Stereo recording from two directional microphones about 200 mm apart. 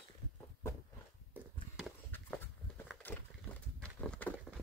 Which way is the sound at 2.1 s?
5° left (ahead or behind).